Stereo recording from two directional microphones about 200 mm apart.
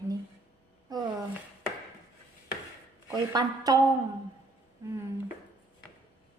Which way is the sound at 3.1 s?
20° right (ahead or behind).